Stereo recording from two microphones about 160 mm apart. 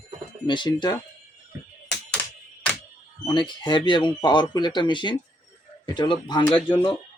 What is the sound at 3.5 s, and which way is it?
Speech, 30° left (ahead or behind).